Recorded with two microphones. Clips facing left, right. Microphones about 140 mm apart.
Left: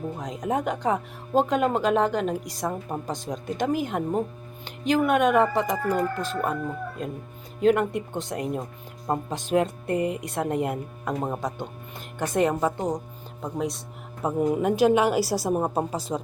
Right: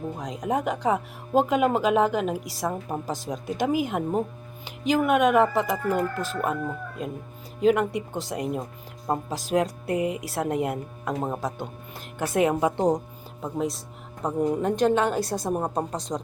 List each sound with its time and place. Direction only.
0.2 s speech: centre (ahead or behind)
12.7 s speech: 30° right (ahead or behind)
13.4 s speech: centre (ahead or behind)